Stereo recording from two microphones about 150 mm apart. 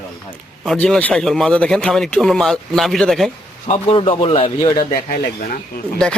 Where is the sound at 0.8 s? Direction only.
10° left (ahead or behind).